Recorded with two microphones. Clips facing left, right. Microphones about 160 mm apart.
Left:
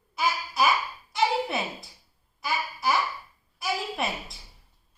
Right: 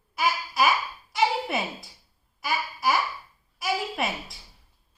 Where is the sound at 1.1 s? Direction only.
Centre (ahead or behind).